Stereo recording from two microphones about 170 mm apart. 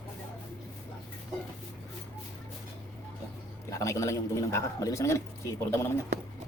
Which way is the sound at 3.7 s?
20° left (ahead or behind).